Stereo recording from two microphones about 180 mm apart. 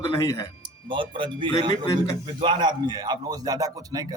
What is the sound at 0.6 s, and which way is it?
A man's voice, 25° right (ahead or behind).